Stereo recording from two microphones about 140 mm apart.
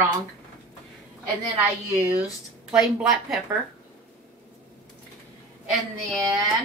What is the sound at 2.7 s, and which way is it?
Speech, centre (ahead or behind).